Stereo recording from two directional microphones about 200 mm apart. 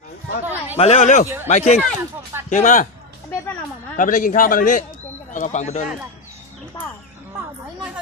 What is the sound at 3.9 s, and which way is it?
A man's voice, 40° left (ahead or behind).